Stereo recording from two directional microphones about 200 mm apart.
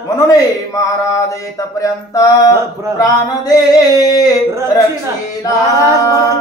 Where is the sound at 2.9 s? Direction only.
20° left (ahead or behind).